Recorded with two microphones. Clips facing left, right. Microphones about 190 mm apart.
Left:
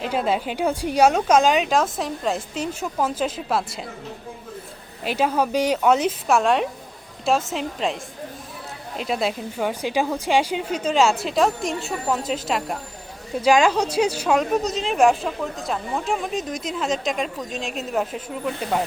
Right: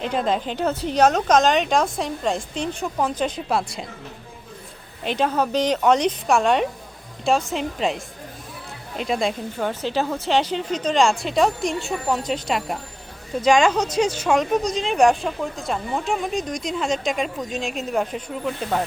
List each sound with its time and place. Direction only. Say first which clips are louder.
0.0 s speech: even; 5° left (ahead or behind)
5.0 s speech: even; 5° left (ahead or behind)